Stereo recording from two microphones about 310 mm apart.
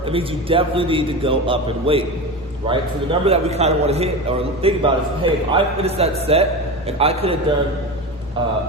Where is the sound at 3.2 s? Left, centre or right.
Centre.